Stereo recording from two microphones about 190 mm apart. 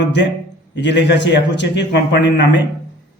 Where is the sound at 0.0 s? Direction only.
65° left (ahead or behind).